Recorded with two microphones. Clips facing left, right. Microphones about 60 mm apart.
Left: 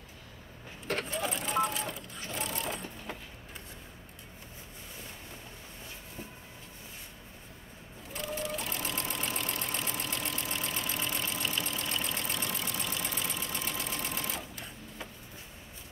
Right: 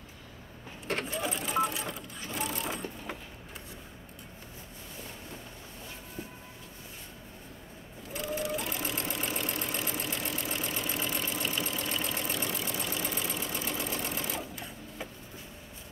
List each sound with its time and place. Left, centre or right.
0.8 s keys jangling: centre
1.2 s vehicle: centre
8.1 s sewing machine: centre
12.6 s engine: centre